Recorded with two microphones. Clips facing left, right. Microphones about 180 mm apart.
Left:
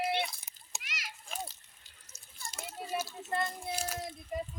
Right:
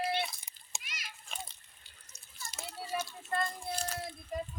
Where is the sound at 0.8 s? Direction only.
90° left.